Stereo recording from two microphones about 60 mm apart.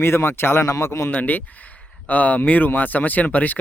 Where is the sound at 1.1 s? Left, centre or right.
Left.